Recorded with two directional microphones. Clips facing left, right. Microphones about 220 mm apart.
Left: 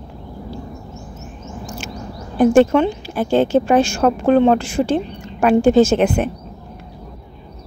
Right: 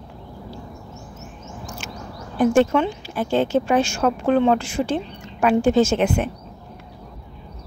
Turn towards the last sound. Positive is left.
turn(degrees=50)  # may be behind; listen again after turning